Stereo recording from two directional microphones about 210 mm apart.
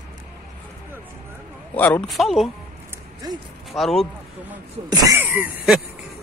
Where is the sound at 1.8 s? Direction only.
5° left (ahead or behind).